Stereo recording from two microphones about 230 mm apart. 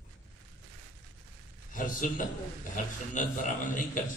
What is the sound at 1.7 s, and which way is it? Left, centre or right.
A man's voice, left.